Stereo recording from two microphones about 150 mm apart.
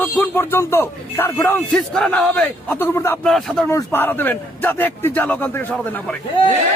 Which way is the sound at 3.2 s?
Centre (ahead or behind).